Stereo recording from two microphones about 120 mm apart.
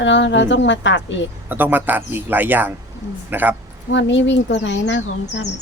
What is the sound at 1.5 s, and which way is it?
Speech, 15° right (ahead or behind).